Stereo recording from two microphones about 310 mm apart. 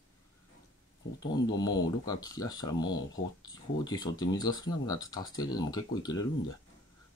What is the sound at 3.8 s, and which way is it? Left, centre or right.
Speech, centre.